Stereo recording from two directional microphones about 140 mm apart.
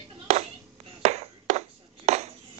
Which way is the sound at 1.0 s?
50° right (ahead or behind).